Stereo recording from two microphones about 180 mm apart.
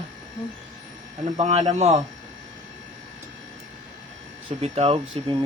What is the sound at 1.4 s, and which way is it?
Speech, 35° right (ahead or behind).